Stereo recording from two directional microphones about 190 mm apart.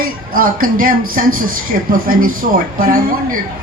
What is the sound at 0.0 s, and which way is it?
Speech, 50° right (ahead or behind).